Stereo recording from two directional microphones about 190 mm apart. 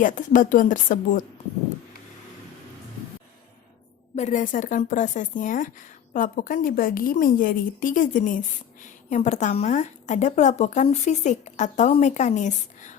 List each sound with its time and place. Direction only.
0.0 s a woman's voice: 45° left (ahead or behind)
4.1 s a woman's voice: 40° left (ahead or behind)